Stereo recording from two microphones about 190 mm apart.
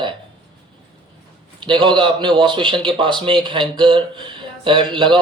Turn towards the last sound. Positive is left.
turn(degrees=-25)  # may be behind; listen again after turning